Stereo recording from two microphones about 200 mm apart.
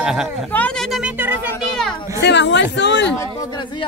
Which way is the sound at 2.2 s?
60° left (ahead or behind).